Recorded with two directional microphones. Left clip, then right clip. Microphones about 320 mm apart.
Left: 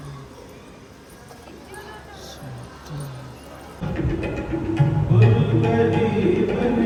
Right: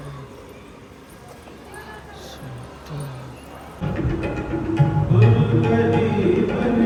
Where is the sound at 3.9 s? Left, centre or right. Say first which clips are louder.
Right 1 dB; centre.